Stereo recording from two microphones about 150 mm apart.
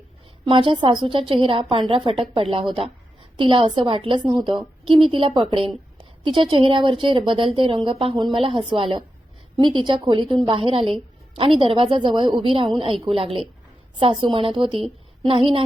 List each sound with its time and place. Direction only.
0.4 s a woman's voice: 35° right (ahead or behind)